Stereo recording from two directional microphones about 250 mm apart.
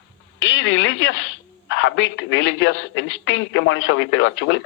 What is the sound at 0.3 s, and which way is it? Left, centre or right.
A woman's voice, left.